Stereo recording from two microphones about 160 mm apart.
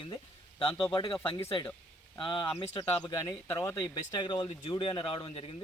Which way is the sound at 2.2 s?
30° left (ahead or behind).